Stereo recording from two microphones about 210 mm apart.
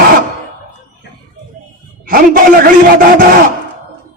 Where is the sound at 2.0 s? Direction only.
40° right (ahead or behind).